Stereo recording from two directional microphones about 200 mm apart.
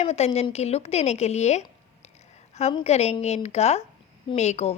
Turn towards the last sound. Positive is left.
turn(degrees=35)  # may be behind; listen again after turning